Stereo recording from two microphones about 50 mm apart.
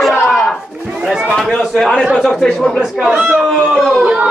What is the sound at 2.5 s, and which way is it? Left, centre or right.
Speech, centre.